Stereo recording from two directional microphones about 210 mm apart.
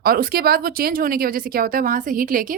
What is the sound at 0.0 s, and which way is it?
A woman's voice, 45° right (ahead or behind).